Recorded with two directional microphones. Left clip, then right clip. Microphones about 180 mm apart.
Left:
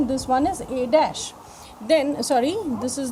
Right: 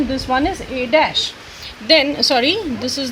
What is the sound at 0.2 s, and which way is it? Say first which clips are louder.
Speech: right 3 dB; 70° left (ahead or behind).